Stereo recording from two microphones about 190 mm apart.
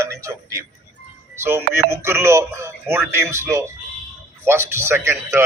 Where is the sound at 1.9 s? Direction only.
15° right (ahead or behind).